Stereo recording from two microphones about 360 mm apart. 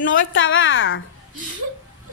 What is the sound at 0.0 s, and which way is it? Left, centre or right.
A woman's voice, left.